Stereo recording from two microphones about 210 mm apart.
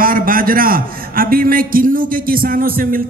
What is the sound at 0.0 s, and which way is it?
A man's voice, 40° right (ahead or behind).